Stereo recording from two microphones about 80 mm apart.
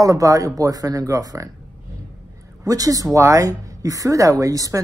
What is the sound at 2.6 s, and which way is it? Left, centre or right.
Speech, right.